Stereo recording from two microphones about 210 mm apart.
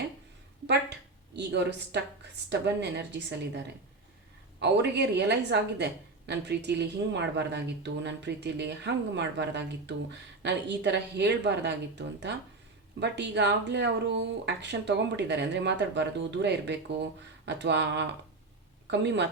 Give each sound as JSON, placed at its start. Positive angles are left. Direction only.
{"t": 1.4, "sound": "a woman's voice", "side_deg": -55}
{"t": 4.6, "sound": "a woman's voice", "side_deg": -55}